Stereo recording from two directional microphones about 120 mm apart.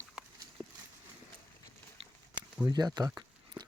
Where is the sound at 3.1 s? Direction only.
35° right (ahead or behind).